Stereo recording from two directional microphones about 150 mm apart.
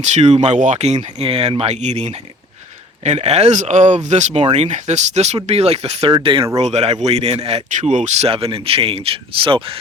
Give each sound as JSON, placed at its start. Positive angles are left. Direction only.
{"t": 0.0, "sound": "speech", "side_deg": -50}